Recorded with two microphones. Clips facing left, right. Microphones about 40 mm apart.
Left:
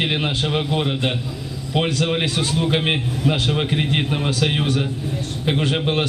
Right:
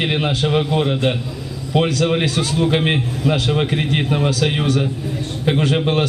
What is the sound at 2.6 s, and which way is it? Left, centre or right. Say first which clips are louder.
A man's voice: right 4 dB; centre.